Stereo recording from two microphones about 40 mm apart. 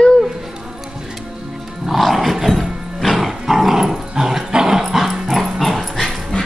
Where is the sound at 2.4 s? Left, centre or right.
Centre.